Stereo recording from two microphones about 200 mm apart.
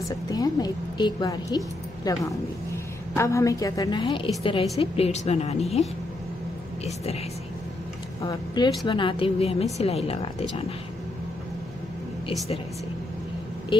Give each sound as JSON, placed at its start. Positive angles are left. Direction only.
{"t": 0.3, "sound": "a woman's voice", "side_deg": 20}
{"t": 8.2, "sound": "a woman's voice", "side_deg": 15}